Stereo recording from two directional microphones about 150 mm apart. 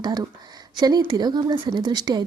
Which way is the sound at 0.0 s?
25° right (ahead or behind).